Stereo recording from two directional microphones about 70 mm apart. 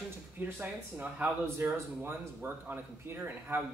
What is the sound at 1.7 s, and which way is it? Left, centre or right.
Speech, right.